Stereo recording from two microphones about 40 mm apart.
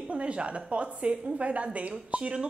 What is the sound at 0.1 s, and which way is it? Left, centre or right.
A woman's voice, right.